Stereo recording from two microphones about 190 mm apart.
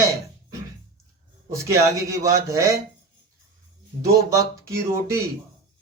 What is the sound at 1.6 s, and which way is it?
Speech, 15° right (ahead or behind).